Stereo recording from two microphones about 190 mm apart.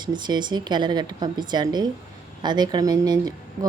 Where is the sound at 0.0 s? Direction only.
25° right (ahead or behind).